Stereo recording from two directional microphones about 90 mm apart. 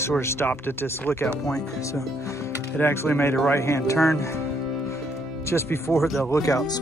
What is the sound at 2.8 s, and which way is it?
Speech, 25° left (ahead or behind).